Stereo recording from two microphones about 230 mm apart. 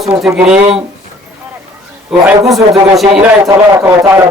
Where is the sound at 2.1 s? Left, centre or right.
Centre.